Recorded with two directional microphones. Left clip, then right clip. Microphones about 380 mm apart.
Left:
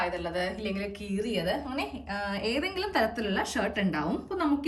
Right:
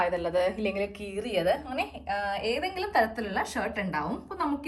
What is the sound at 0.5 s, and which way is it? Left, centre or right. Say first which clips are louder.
A woman's voice: right 4 dB; centre.